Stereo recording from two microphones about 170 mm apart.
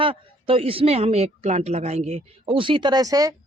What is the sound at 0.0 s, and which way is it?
Speech, 30° right (ahead or behind).